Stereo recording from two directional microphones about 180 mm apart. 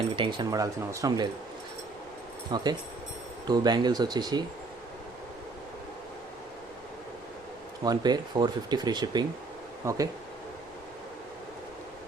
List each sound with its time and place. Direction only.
0.2 s speech: 25° right (ahead or behind)
2.5 s speech: 25° right (ahead or behind)
7.9 s speech: 25° right (ahead or behind)